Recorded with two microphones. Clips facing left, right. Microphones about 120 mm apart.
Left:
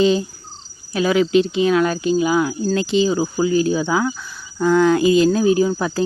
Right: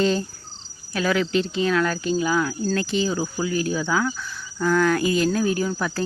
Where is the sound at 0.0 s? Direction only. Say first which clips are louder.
Left 5 dB; 15° left (ahead or behind).